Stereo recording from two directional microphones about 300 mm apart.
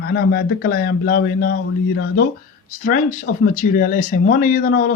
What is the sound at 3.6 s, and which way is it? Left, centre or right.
Speech, left.